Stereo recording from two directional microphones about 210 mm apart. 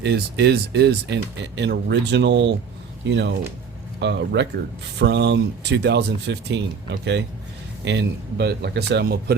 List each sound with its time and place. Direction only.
0.0 s speech: 55° right (ahead or behind)